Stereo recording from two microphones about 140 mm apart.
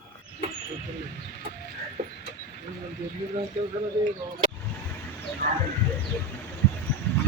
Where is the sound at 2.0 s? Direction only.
75° right (ahead or behind).